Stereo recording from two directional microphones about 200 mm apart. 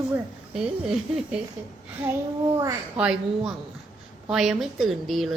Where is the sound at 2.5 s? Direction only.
15° right (ahead or behind).